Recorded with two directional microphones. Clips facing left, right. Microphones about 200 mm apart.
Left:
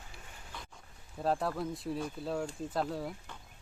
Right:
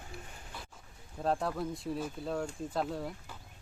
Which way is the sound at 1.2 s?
Centre (ahead or behind).